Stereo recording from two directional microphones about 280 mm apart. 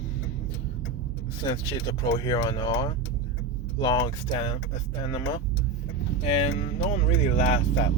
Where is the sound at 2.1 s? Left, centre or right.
Centre.